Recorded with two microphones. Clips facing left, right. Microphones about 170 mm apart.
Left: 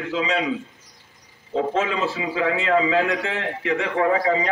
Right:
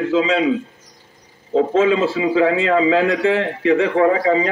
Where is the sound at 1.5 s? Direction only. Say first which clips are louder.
Right 8 dB; 30° right (ahead or behind).